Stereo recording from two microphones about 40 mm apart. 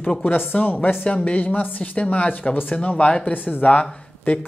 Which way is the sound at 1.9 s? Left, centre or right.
Left.